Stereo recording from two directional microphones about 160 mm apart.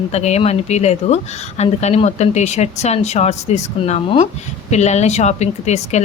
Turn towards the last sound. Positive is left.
turn(degrees=45)  # may be behind; listen again after turning